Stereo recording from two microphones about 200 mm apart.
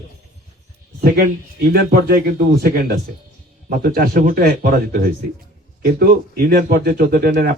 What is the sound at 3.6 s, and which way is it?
Speech, 50° right (ahead or behind).